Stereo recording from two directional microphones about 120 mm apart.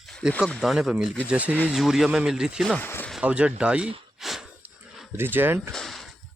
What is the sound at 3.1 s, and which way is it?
Speech, 10° right (ahead or behind).